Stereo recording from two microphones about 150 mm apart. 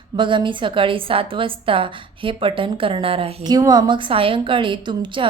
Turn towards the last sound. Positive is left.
turn(degrees=-30)  # may be behind; listen again after turning